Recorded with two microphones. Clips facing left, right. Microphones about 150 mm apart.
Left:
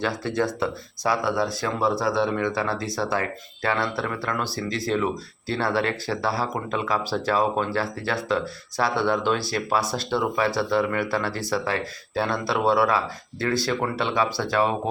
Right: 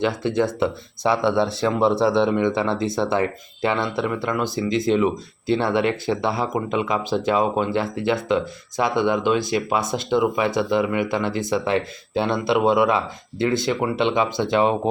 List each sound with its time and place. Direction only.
0.0 s speech: 20° right (ahead or behind)